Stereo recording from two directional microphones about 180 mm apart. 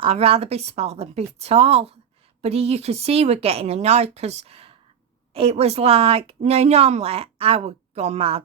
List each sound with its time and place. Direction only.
0.0 s a woman's voice: 30° right (ahead or behind)